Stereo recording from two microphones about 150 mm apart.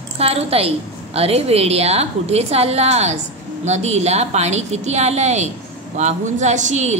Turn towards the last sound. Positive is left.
turn(degrees=-50)  # may be behind; listen again after turning